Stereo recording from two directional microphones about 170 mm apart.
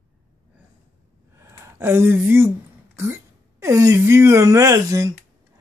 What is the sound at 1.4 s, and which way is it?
Speech, 15° right (ahead or behind).